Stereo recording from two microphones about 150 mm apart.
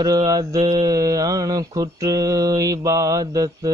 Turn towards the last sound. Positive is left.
turn(degrees=-25)  # may be behind; listen again after turning